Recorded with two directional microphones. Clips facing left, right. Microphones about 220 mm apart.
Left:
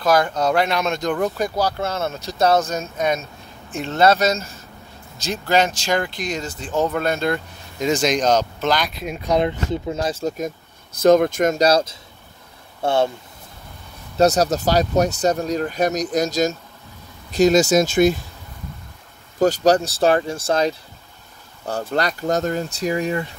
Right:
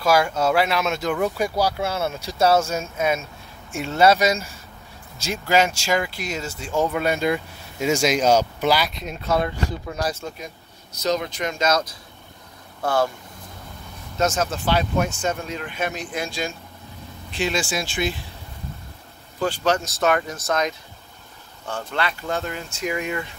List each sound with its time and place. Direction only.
0.0 s speech: 10° right (ahead or behind)
9.3 s speech: 20° left (ahead or behind)
10.2 s speech: 45° left (ahead or behind); by 13.1 s 25° left (ahead or behind)
14.1 s speech: 35° left (ahead or behind)
19.4 s speech: 40° left (ahead or behind)